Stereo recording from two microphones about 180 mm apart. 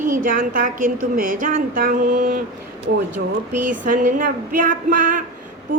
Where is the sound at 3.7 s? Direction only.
45° right (ahead or behind).